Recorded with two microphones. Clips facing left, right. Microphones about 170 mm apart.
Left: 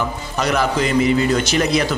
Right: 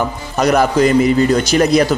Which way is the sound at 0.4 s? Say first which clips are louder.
Right 6 dB; 45° right (ahead or behind).